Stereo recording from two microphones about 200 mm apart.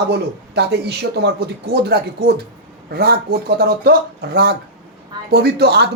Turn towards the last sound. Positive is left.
turn(degrees=-55)  # may be behind; listen again after turning